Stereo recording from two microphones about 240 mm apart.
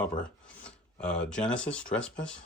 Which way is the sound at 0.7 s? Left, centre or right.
Centre.